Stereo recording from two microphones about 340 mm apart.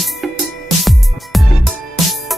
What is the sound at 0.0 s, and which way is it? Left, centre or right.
Music, centre.